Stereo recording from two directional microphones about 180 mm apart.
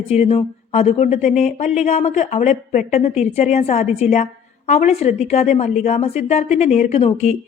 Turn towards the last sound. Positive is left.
turn(degrees=35)  # may be behind; listen again after turning